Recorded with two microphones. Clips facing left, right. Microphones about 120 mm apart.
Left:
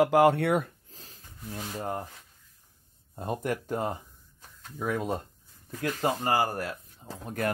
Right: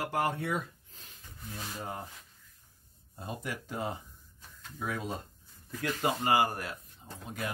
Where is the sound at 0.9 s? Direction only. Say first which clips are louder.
Left 2 dB; 35° left (ahead or behind).